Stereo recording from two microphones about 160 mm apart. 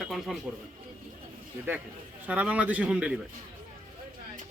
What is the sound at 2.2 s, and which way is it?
Speech, 10° right (ahead or behind).